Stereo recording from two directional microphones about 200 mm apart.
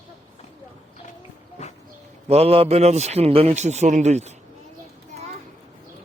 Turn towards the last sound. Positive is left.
turn(degrees=-35)  # may be behind; listen again after turning